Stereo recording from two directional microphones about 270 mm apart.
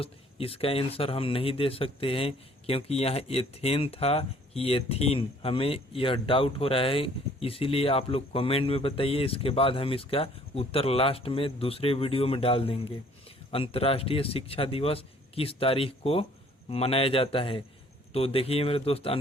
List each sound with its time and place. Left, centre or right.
0.0 s speech: left